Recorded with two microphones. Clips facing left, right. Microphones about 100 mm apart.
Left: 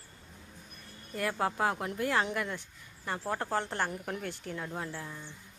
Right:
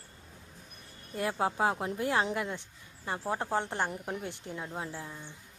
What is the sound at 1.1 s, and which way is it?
Speech, 25° right (ahead or behind).